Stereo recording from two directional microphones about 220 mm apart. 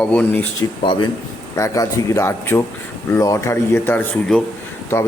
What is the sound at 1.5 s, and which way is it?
Speech, 15° left (ahead or behind).